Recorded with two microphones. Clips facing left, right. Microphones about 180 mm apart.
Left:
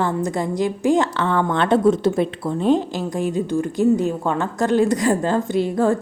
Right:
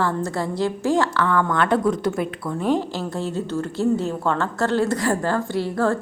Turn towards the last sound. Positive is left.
turn(degrees=15)  # may be behind; listen again after turning